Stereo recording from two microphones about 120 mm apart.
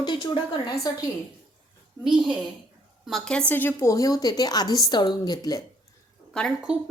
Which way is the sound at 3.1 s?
5° left (ahead or behind).